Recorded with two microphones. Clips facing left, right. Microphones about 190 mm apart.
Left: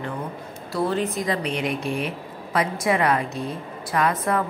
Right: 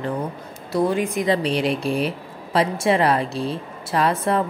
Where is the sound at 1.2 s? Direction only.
30° right (ahead or behind).